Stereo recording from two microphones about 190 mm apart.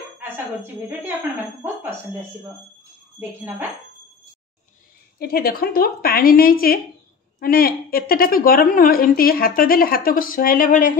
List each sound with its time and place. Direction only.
1.6 s speech: 10° right (ahead or behind)
3.2 s speech: 10° right (ahead or behind)
5.2 s a woman's voice: 55° left (ahead or behind)